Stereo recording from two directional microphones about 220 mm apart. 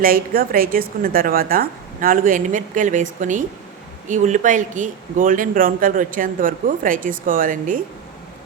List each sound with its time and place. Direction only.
0.0 s speech: 40° right (ahead or behind)